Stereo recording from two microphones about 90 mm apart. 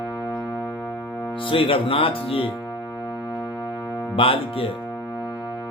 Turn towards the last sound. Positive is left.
turn(degrees=90)